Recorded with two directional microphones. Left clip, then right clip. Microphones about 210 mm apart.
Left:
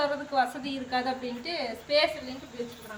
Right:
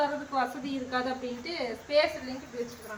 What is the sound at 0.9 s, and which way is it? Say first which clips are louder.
Speech: left 2 dB; 45° left (ahead or behind).